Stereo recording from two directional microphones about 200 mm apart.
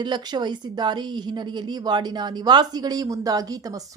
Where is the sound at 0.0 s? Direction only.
20° right (ahead or behind).